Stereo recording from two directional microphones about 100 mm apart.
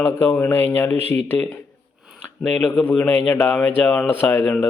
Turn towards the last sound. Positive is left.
turn(degrees=10)  # may be behind; listen again after turning